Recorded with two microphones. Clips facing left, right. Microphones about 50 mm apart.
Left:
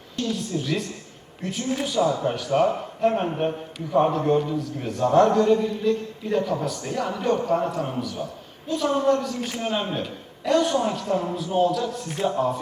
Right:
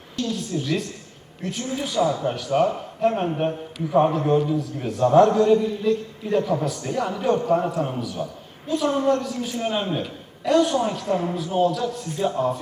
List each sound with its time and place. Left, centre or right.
0.3 s a man's voice: centre
11.1 s speech: centre
11.3 s a man's voice: centre